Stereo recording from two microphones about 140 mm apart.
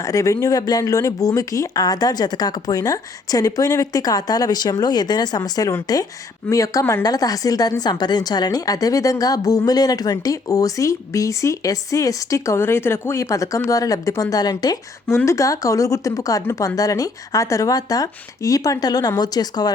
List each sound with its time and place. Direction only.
0.0 s a woman's voice: 25° left (ahead or behind)